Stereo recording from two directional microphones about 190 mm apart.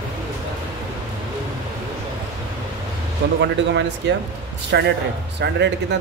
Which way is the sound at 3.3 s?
65° right (ahead or behind).